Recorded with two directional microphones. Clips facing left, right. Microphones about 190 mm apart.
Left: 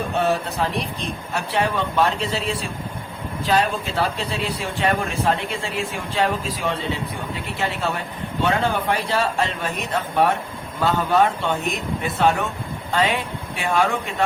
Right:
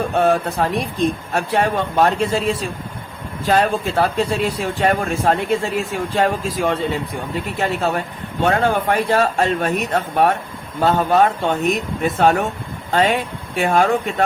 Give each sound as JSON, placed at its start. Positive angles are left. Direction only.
{"t": 0.2, "sound": "speech", "side_deg": -50}